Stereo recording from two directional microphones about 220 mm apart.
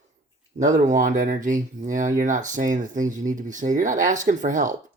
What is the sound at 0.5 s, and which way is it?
Speech, 35° right (ahead or behind).